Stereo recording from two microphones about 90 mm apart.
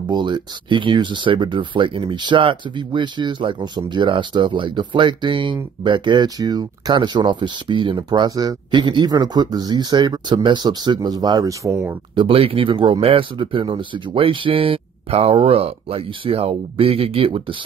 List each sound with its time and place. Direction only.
0.1 s speech: 60° right (ahead or behind); by 11.9 s 35° right (ahead or behind)
12.2 s speech: 90° right